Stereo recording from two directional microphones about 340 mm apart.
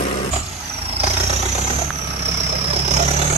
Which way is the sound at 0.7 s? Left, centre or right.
Centre.